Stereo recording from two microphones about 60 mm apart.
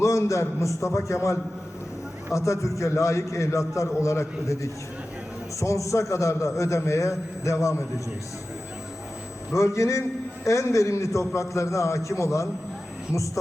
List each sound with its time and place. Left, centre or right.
0.0 s a man's voice: left
9.6 s a man's voice: left